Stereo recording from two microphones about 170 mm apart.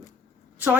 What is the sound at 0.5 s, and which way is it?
Speech, 10° right (ahead or behind).